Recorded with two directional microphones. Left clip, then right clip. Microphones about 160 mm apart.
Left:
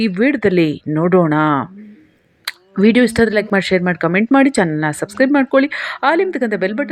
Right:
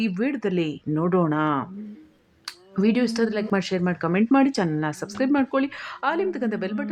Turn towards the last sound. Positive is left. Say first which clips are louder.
# left 10 dB
turn(degrees=25)  # may be behind; listen again after turning